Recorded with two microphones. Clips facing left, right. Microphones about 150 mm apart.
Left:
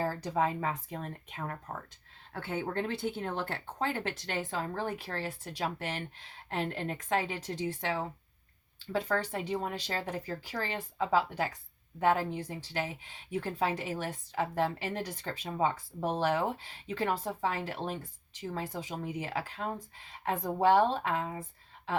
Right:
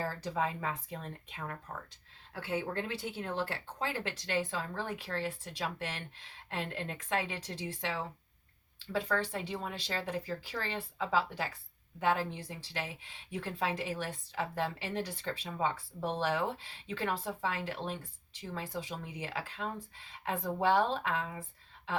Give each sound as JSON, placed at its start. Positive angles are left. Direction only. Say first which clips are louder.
{"t": 0.0, "sound": "speech", "louder": "left 4 dB", "side_deg": 35}
{"t": 3.0, "sound": "speech", "louder": "left 2 dB", "side_deg": 50}